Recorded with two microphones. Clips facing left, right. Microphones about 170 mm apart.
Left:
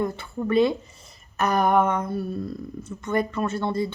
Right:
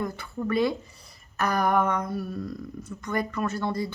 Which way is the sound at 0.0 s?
25° left (ahead or behind).